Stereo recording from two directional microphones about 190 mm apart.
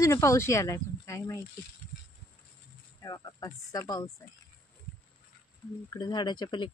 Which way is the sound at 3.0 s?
20° left (ahead or behind).